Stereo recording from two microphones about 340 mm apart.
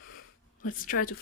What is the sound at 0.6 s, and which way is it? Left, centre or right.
Speech, left.